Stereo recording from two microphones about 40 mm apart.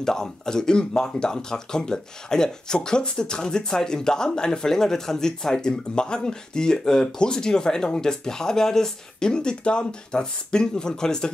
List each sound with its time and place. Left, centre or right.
0.0 s speech: centre